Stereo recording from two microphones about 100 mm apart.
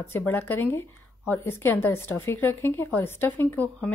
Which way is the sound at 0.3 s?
20° left (ahead or behind).